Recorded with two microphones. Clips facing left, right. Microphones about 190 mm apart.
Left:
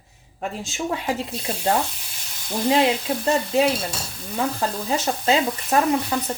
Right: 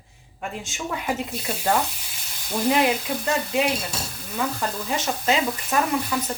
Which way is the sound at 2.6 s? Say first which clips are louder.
Left 2 dB; 25° left (ahead or behind).